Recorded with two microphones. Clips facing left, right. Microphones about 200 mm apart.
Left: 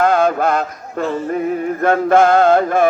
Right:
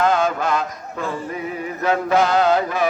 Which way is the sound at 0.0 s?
55° left (ahead or behind).